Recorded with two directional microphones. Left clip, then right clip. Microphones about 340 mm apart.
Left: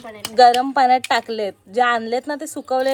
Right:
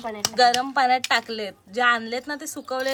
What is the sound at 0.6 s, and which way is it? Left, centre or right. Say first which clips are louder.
Speech: left 5 dB; centre.